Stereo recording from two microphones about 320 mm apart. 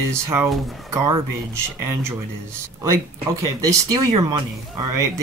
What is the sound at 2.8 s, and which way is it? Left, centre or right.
Speech, right.